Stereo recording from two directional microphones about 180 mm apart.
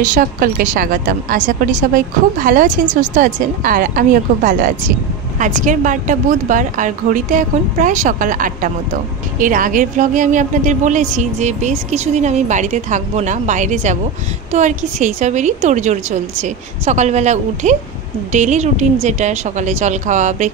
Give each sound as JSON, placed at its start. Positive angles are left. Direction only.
{"t": 0.0, "sound": "a woman's voice", "side_deg": -50}